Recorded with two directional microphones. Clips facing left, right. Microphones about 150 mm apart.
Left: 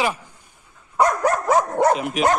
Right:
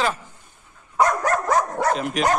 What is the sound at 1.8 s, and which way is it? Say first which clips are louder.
Speech: left 3 dB; 10° left (ahead or behind).